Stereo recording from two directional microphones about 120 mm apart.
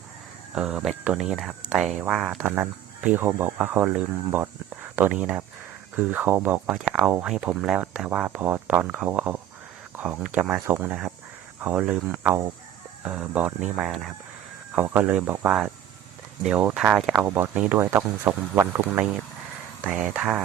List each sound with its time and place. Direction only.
0.5 s speech: 5° right (ahead or behind)
14.8 s speech: 15° right (ahead or behind)
17.9 s speech: 20° right (ahead or behind)
20.1 s speech: 10° right (ahead or behind)